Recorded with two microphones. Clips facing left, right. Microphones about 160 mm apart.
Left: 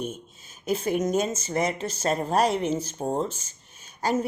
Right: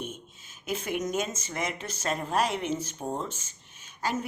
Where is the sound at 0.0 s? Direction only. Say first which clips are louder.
Left 5 dB; 40° left (ahead or behind).